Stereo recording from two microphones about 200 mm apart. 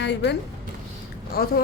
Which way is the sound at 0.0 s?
60° left (ahead or behind).